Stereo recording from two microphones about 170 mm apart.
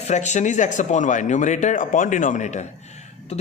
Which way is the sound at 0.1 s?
45° left (ahead or behind).